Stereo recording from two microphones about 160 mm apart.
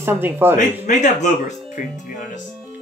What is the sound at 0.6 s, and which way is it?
Speech, 50° left (ahead or behind).